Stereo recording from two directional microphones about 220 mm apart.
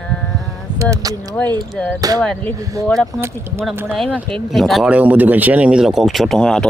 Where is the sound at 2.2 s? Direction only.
5° left (ahead or behind).